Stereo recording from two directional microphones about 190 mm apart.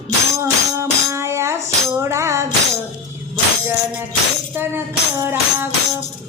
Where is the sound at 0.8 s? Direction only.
15° right (ahead or behind).